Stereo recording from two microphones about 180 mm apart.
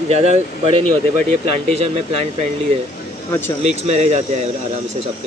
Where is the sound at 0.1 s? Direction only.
35° right (ahead or behind).